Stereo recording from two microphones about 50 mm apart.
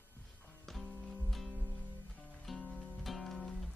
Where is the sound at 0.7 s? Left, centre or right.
Centre.